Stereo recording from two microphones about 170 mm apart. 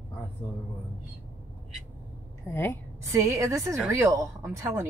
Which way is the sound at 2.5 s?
15° left (ahead or behind).